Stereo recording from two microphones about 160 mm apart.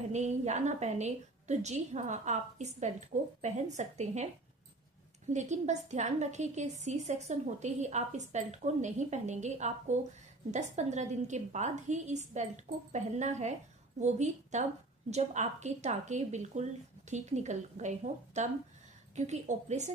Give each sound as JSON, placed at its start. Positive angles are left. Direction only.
{"t": 0.1, "sound": "a woman's voice", "side_deg": -45}
{"t": 5.3, "sound": "a woman's voice", "side_deg": -45}